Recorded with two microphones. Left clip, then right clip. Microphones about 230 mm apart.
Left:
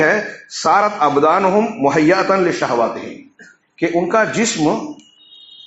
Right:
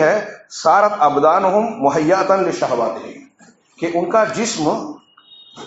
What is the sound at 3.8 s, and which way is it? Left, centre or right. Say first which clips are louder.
Speech: left 1 dB; left.